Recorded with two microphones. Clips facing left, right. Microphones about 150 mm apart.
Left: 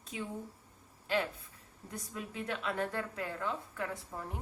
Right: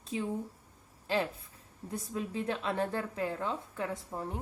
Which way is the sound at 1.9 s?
30° right (ahead or behind).